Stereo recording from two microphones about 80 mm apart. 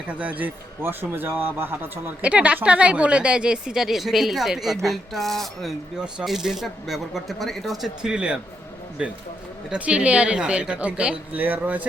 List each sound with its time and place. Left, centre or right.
0.1 s speech: centre
2.2 s a woman's voice: centre
6.0 s a woman's voice: centre